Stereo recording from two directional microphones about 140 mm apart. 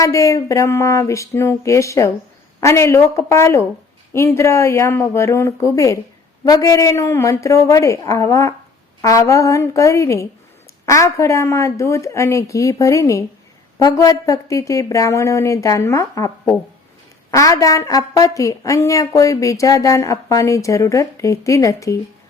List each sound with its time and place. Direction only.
0.0 s a woman's voice: 20° left (ahead or behind)